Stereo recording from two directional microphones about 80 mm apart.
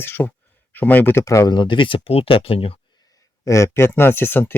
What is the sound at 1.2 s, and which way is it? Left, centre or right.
Speech, left.